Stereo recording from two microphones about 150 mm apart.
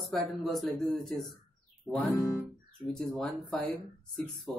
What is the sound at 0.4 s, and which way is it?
Speech, centre (ahead or behind).